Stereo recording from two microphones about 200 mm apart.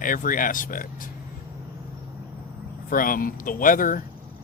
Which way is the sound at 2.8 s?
45° left (ahead or behind).